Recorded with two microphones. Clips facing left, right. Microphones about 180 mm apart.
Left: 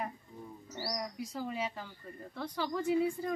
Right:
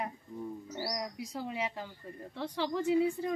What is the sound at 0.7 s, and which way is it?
Mouse, 15° right (ahead or behind).